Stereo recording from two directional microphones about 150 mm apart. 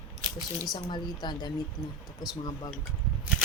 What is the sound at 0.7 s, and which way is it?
Speech, 30° left (ahead or behind).